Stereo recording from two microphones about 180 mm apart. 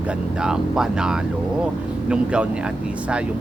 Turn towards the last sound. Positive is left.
turn(degrees=-5)  # may be behind; listen again after turning